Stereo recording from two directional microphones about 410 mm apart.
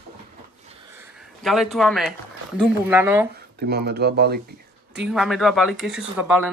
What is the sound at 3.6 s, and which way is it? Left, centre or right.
Speech, right.